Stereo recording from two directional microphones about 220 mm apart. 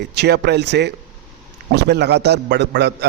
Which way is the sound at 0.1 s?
50° right (ahead or behind).